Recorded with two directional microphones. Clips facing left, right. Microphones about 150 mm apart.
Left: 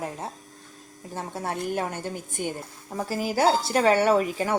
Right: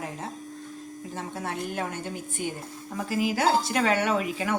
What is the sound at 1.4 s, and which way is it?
Speech, 40° left (ahead or behind).